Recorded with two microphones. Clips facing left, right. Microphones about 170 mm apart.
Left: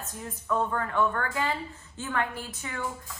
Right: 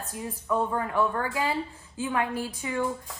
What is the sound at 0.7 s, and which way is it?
Speech, 25° right (ahead or behind).